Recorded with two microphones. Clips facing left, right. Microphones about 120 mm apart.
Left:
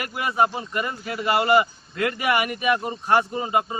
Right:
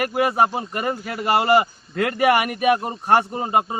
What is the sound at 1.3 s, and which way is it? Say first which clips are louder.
Speech: right 2 dB; 35° right (ahead or behind).